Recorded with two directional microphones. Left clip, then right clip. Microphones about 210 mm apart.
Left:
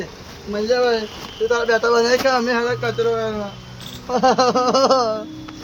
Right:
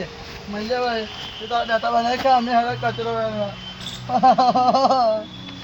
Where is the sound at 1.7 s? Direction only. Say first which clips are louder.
Left 3 dB; 15° left (ahead or behind).